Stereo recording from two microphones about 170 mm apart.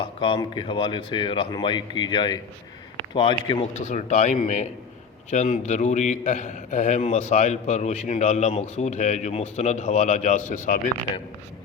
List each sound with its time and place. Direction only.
0.0 s speech: 30° left (ahead or behind)
3.8 s a man's voice: 40° left (ahead or behind)